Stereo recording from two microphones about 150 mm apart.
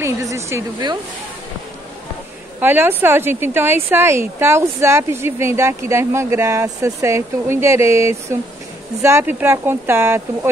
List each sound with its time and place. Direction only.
0.0 s speech: 20° right (ahead or behind)
2.6 s a woman's voice: 15° right (ahead or behind)